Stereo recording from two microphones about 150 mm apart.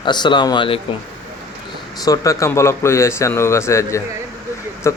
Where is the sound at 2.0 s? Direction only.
20° left (ahead or behind).